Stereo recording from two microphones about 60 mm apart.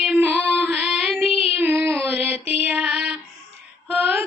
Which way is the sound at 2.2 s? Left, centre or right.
Right.